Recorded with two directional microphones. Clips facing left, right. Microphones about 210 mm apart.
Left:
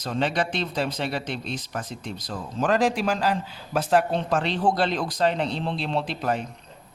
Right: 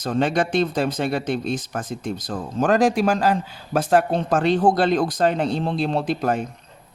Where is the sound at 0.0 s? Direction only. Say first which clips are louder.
Right 5 dB; 50° right (ahead or behind).